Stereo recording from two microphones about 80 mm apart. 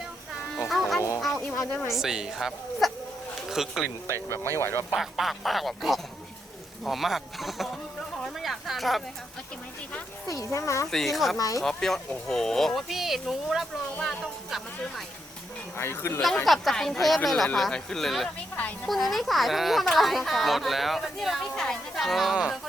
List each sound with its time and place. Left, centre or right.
0.7 s music: centre
1.4 s a sound: centre
1.9 s speech: centre
4.5 s speech: left
4.9 s speech: centre
8.2 s a sound: centre
10.2 s speech: left
10.9 s speech: centre
11.3 s speech: left
11.6 s speech: centre
14.0 s a sound: centre
15.8 s speech: left
16.3 s speech: centre